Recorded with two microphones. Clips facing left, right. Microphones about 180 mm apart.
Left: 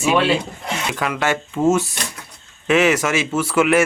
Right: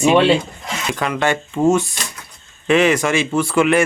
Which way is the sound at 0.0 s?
5° left (ahead or behind).